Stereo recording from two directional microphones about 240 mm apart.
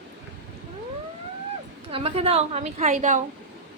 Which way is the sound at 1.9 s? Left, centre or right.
Right.